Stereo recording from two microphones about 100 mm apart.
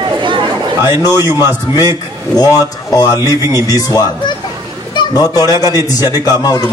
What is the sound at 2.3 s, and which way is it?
A man's voice, 40° left (ahead or behind).